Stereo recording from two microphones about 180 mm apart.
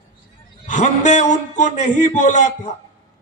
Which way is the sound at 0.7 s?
40° left (ahead or behind).